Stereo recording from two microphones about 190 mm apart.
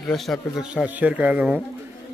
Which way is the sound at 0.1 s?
Centre (ahead or behind).